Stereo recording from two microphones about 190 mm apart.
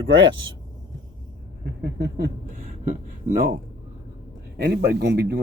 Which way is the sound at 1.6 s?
60° right (ahead or behind).